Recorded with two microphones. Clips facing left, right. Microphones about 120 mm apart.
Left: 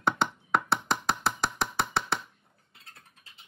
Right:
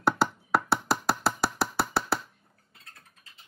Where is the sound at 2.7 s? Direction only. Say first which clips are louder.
Even; 25° left (ahead or behind).